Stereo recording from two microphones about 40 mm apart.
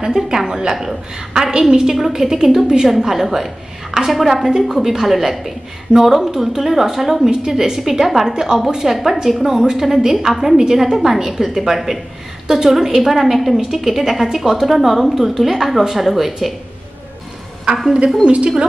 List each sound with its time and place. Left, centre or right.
0.0 s a woman's voice: centre
18.2 s a woman's voice: right